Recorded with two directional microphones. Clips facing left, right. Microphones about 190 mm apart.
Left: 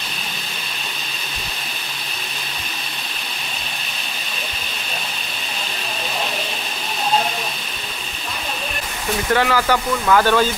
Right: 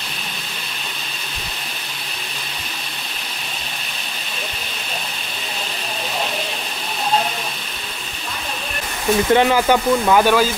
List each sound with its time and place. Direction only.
9.3 s speech: 20° right (ahead or behind)